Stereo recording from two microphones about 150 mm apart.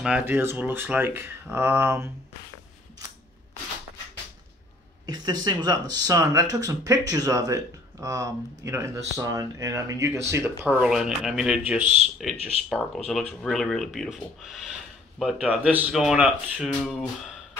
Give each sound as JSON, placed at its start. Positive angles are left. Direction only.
{"t": 0.0, "sound": "speech", "side_deg": -10}
{"t": 5.0, "sound": "speech", "side_deg": -25}
{"t": 10.8, "sound": "speech", "side_deg": -5}
{"t": 11.8, "sound": "speech", "side_deg": -50}
{"t": 12.6, "sound": "speech", "side_deg": 0}